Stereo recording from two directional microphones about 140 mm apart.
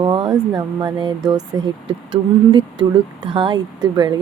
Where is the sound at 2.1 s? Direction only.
35° right (ahead or behind).